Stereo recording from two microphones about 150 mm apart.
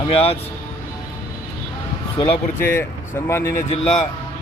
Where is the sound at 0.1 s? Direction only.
40° left (ahead or behind).